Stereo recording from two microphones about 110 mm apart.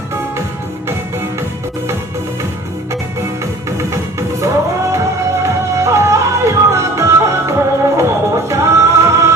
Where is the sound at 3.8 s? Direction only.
25° right (ahead or behind).